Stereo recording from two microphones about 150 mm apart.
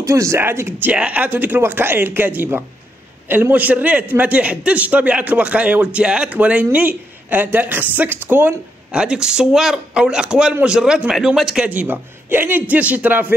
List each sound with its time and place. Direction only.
0.0 s a man's voice: 20° right (ahead or behind)